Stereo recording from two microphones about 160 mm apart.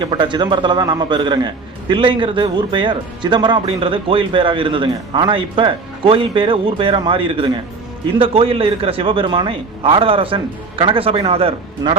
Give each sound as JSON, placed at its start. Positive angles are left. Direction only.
{"t": 0.0, "sound": "a man's voice", "side_deg": -30}